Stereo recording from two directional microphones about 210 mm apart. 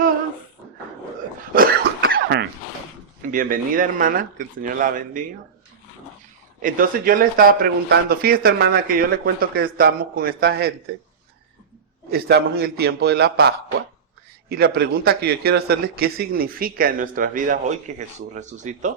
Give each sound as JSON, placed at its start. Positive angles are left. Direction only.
{"t": 1.5, "sound": "cough", "side_deg": -45}
{"t": 3.3, "sound": "a man's voice", "side_deg": -40}
{"t": 6.6, "sound": "speech", "side_deg": -40}
{"t": 12.1, "sound": "speech", "side_deg": -45}
{"t": 14.5, "sound": "a man's voice", "side_deg": -50}